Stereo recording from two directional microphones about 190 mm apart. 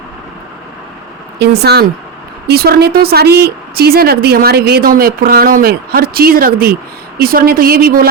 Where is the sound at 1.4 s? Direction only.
60° right (ahead or behind).